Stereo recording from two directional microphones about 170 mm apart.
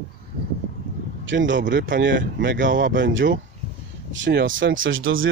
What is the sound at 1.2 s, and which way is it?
Speech, 90° right.